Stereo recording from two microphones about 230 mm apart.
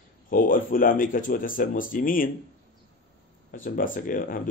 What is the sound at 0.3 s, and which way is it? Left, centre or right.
Speech, left.